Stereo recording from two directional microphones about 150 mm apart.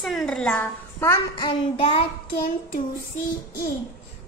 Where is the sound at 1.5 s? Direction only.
35° left (ahead or behind).